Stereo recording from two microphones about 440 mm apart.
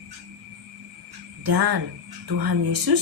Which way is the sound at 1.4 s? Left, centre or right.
Right.